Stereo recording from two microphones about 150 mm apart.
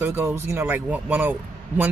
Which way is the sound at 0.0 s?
15° right (ahead or behind).